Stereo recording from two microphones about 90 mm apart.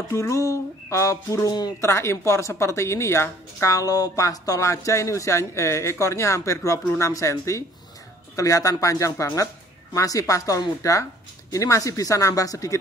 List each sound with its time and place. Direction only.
0.1 s a woman's voice: 30° left (ahead or behind)